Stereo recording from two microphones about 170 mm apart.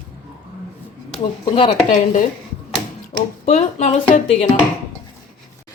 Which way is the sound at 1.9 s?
50° left (ahead or behind).